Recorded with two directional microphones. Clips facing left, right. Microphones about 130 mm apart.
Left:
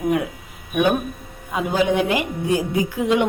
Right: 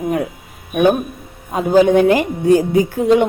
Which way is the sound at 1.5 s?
40° right (ahead or behind).